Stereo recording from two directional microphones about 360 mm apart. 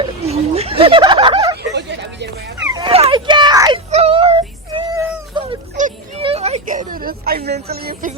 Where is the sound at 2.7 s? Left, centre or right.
Centre.